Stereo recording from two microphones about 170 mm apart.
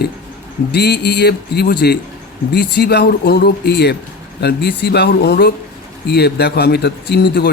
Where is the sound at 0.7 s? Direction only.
75° left (ahead or behind).